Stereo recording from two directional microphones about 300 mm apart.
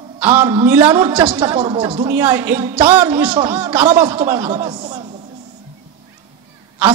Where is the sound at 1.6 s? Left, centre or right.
Centre.